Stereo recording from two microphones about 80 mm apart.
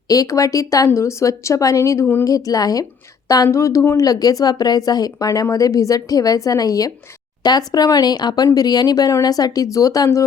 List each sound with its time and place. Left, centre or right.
0.1 s a woman's voice: left
2.2 s a woman's voice: left